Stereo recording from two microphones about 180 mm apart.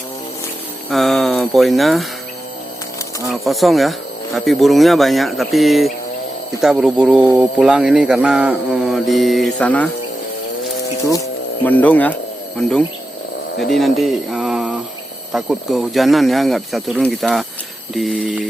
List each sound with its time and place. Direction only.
0.9 s speech: centre (ahead or behind)
3.2 s mantra: centre (ahead or behind)
9.6 s speech: 10° left (ahead or behind)
11.1 s electric shaver: 15° left (ahead or behind)
12.5 s mantra: 5° left (ahead or behind)
13.6 s speech: centre (ahead or behind)
15.3 s mantra: centre (ahead or behind)